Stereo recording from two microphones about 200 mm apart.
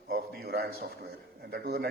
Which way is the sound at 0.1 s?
50° right (ahead or behind).